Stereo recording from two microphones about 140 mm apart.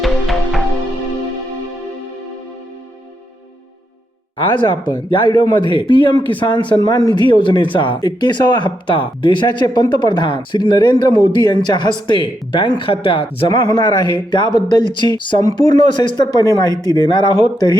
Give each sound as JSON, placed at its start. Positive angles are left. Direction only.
{"t": 0.0, "sound": "music", "side_deg": 0}
{"t": 4.5, "sound": "speech", "side_deg": 30}